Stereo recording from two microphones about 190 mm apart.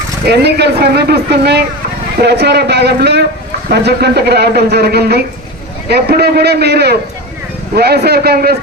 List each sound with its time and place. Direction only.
0.3 s speech: 60° right (ahead or behind)